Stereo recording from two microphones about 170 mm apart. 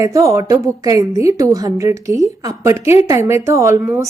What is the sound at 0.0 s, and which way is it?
A woman's voice, 20° right (ahead or behind).